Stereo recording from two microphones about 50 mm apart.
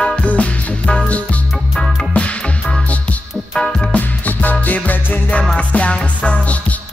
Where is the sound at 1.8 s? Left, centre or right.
Centre.